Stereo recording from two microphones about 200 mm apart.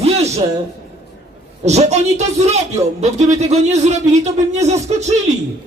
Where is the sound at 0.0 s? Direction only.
30° right (ahead or behind).